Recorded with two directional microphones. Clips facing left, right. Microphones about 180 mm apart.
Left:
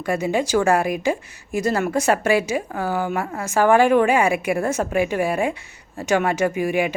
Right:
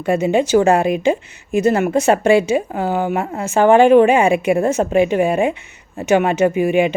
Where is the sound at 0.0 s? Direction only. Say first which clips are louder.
Right 6 dB; 25° right (ahead or behind).